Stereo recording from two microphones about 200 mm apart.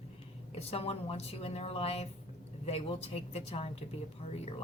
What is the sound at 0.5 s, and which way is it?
A woman's voice, 30° left (ahead or behind).